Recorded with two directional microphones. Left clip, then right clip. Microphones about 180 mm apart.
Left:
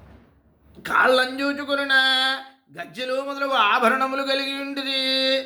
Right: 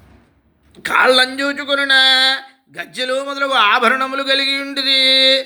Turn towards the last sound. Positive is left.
turn(degrees=-15)  # may be behind; listen again after turning